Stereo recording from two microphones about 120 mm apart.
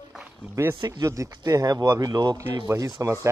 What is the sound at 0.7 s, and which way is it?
Speech, 35° right (ahead or behind).